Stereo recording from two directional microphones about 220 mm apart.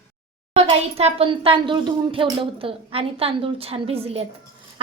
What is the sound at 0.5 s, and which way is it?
Speech, 30° right (ahead or behind).